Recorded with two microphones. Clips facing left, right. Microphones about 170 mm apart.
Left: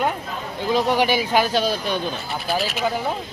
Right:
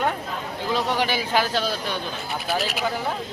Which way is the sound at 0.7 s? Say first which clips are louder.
Left 5 dB; 15° left (ahead or behind).